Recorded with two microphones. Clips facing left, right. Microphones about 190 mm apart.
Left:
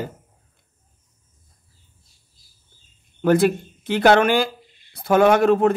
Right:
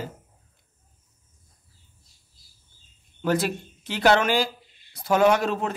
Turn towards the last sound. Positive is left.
turn(degrees=55)  # may be behind; listen again after turning